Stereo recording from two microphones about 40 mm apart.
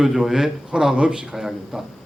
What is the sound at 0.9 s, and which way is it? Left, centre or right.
Speech, right.